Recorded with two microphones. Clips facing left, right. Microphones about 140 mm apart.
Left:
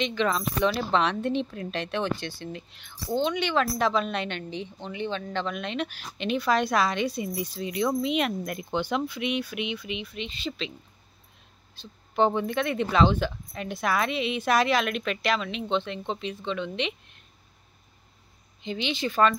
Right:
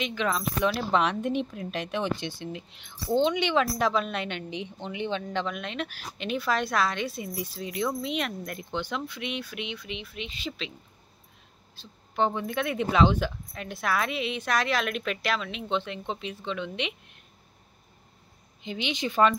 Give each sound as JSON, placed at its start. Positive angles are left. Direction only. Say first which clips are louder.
{"t": 0.0, "sound": "speech", "louder": "left 2 dB", "side_deg": -5}
{"t": 3.7, "sound": "a woman's voice", "louder": "left 1 dB", "side_deg": -10}
{"t": 11.7, "sound": "a sound", "louder": "left 4 dB", "side_deg": 0}
{"t": 12.4, "sound": "a woman's voice", "louder": "left 2 dB", "side_deg": -5}
{"t": 18.6, "sound": "speech", "louder": "left 2 dB", "side_deg": -10}